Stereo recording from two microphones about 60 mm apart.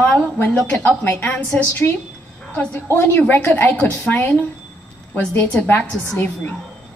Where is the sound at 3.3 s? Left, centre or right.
Left.